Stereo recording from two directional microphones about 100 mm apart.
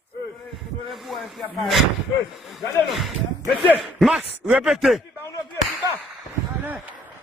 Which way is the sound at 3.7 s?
5° right (ahead or behind).